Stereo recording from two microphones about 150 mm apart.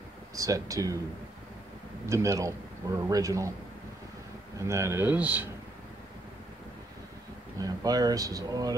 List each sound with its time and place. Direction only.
0.4 s a man's voice: 20° right (ahead or behind)
2.0 s a man's voice: 20° right (ahead or behind)
4.6 s speech: 20° right (ahead or behind)
7.5 s a man's voice: 25° right (ahead or behind)